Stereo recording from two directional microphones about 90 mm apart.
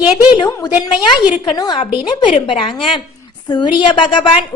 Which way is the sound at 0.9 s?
60° left (ahead or behind).